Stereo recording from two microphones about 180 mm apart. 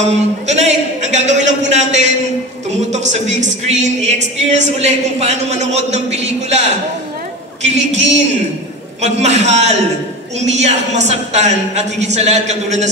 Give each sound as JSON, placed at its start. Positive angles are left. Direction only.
{"t": 0.0, "sound": "a woman's voice", "side_deg": -40}
{"t": 7.6, "sound": "a woman's voice", "side_deg": -40}
{"t": 9.0, "sound": "a woman's voice", "side_deg": -35}